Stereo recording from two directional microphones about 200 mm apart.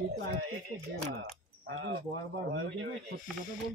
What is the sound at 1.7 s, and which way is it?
Speech, 85° right.